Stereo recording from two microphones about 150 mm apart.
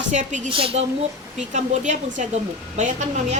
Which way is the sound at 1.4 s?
55° right (ahead or behind).